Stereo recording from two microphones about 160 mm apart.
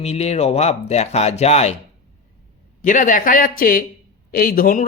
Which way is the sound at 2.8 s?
55° left (ahead or behind).